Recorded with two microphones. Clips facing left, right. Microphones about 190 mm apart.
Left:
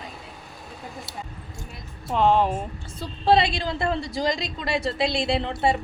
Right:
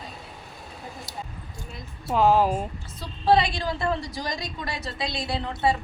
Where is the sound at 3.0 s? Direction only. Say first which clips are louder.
Left 1 dB; 25° left (ahead or behind).